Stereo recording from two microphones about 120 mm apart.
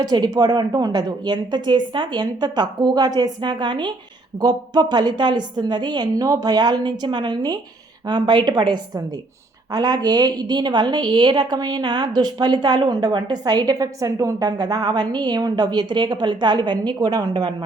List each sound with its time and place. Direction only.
0.0 s a woman's voice: 35° right (ahead or behind)